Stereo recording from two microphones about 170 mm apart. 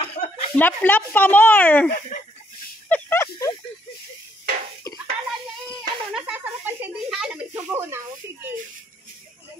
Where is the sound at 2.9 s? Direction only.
15° left (ahead or behind).